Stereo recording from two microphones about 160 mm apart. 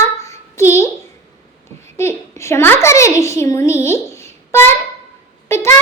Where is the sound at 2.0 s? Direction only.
15° left (ahead or behind).